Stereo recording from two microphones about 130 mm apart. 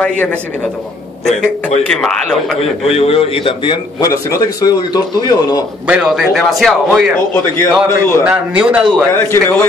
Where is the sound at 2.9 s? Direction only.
45° left (ahead or behind).